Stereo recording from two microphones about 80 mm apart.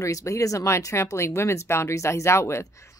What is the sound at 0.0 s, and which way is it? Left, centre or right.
Speech, left.